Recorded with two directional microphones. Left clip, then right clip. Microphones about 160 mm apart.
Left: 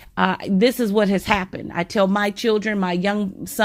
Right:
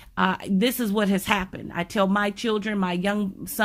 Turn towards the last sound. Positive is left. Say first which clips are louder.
# left 4 dB
turn(degrees=25)  # may be behind; listen again after turning